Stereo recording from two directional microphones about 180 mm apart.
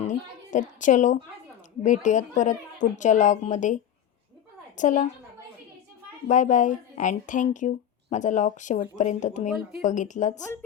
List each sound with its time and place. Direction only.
0.0 s a sound: 45° left (ahead or behind)
0.8 s speech: 45° left (ahead or behind)
4.8 s speech: 45° left (ahead or behind)
6.2 s speech: 45° left (ahead or behind)